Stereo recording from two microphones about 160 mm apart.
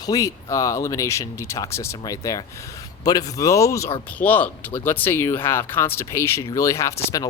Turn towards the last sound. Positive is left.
turn(degrees=20)  # may be behind; listen again after turning